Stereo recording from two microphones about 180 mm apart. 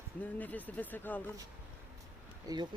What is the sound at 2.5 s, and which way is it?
Speech, 20° right (ahead or behind).